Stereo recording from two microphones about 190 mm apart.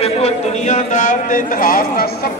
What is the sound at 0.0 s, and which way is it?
A man's voice, 35° left (ahead or behind).